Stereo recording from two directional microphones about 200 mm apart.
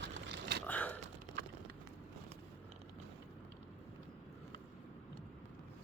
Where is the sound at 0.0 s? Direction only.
60° right (ahead or behind).